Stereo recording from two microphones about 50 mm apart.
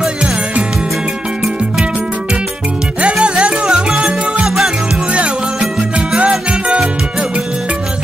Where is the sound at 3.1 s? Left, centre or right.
Centre.